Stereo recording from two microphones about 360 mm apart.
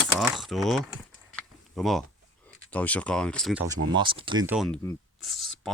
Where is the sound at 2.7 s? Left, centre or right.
Centre.